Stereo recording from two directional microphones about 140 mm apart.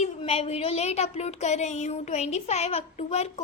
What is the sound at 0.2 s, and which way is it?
Speech, 45° left (ahead or behind).